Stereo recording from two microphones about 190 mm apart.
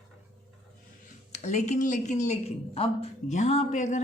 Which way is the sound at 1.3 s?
40° left (ahead or behind).